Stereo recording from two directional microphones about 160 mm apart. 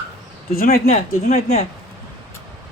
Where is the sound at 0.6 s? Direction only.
65° left (ahead or behind).